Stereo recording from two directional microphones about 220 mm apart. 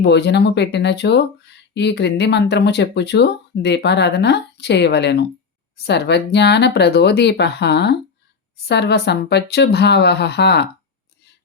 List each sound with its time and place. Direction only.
0.0 s speech: 50° left (ahead or behind)